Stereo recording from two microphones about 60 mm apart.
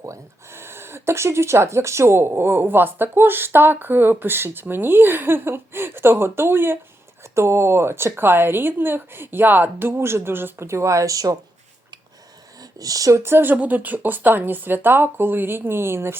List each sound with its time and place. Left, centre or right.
0.5 s speech: right
10.7 s speech: right
12.5 s speech: right
13.2 s speech: right